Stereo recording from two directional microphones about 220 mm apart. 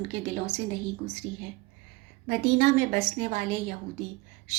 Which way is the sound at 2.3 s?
30° right (ahead or behind).